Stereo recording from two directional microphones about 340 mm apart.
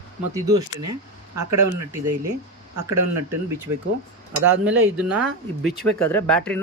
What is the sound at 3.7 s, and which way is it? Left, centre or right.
Speech, right.